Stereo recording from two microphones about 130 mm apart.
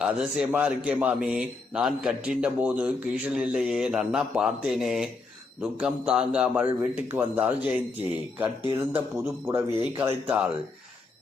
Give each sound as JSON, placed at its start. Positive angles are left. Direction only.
{"t": 0.0, "sound": "a man's voice", "side_deg": -5}